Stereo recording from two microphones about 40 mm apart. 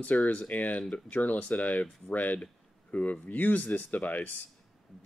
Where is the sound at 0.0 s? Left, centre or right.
Left.